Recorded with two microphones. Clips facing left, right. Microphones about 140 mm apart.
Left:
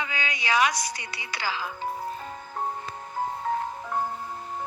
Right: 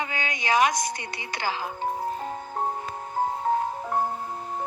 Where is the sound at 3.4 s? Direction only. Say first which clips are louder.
Right 4 dB; 30° right (ahead or behind).